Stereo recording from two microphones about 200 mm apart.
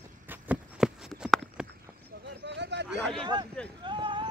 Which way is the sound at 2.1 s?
55° right (ahead or behind).